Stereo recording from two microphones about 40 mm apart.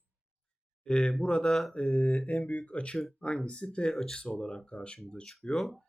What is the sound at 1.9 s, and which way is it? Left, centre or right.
Speech, left.